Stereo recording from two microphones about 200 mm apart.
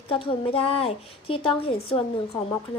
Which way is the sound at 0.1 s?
25° left (ahead or behind).